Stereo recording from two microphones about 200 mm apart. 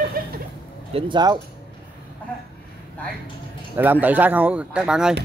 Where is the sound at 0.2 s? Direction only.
45° right (ahead or behind).